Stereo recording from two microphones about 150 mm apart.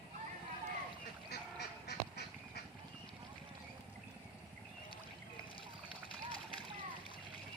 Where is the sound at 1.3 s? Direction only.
90° left.